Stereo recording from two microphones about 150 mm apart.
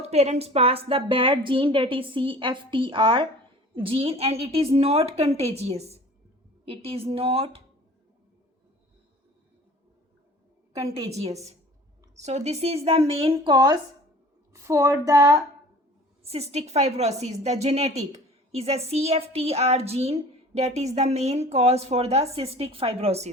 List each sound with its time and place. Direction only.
0.0 s a woman's voice: 45° right (ahead or behind)
12.1 s speech: 50° right (ahead or behind); by 13.7 s 30° right (ahead or behind)
14.5 s speech: 20° right (ahead or behind)
16.2 s speech: 45° right (ahead or behind)